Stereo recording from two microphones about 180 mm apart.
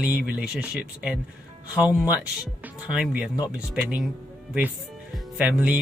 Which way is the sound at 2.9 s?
5° right (ahead or behind).